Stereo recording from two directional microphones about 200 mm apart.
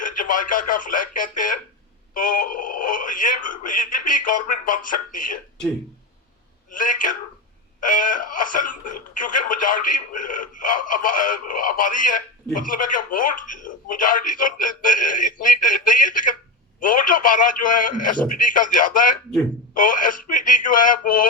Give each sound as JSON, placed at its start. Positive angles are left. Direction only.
{"t": 0.0, "sound": "speech", "side_deg": 40}
{"t": 6.7, "sound": "a man's voice", "side_deg": 40}